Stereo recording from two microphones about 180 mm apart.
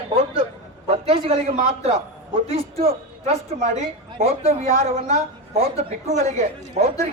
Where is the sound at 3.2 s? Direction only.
40° right (ahead or behind).